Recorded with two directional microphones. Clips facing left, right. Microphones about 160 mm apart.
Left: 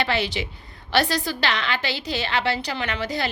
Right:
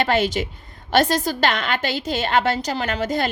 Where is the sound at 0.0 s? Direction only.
45° right (ahead or behind).